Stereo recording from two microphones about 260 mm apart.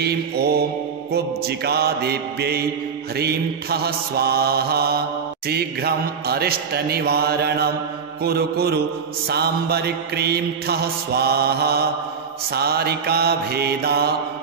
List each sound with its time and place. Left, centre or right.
0.0 s mantra: right